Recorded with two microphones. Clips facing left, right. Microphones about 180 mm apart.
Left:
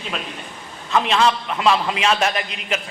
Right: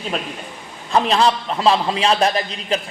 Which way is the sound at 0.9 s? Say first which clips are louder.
Right 2 dB; 35° right (ahead or behind).